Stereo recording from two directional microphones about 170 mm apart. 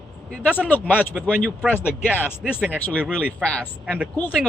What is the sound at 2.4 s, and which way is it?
Speech, 5° right (ahead or behind).